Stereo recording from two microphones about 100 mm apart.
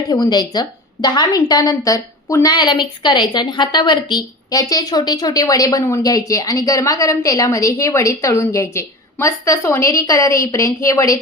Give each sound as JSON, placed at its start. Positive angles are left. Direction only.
{"t": 0.1, "sound": "a woman's voice", "side_deg": 45}